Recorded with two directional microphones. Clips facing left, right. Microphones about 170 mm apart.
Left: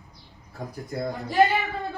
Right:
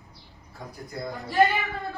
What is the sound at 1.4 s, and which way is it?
Speech, 20° left (ahead or behind).